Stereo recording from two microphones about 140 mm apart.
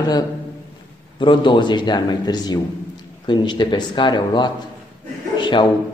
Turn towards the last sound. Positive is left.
turn(degrees=35)  # may be behind; listen again after turning